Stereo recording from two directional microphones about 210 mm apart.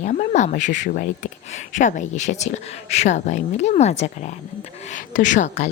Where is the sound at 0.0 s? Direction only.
35° left (ahead or behind).